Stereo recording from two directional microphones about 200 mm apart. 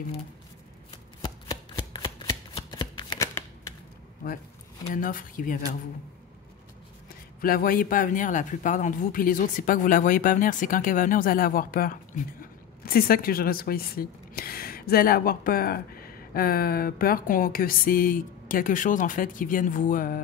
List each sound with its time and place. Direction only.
2.0 s shuffling cards: 25° left (ahead or behind)
4.9 s speech: 40° left (ahead or behind)
7.4 s speech: 45° left (ahead or behind)